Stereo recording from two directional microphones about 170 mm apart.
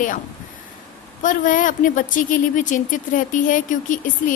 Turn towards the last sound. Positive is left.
turn(degrees=50)  # may be behind; listen again after turning